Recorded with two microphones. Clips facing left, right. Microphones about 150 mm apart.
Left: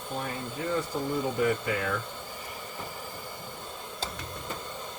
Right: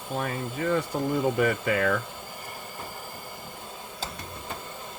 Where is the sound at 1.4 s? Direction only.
75° right (ahead or behind).